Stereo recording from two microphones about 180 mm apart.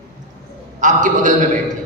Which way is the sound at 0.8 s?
45° right (ahead or behind).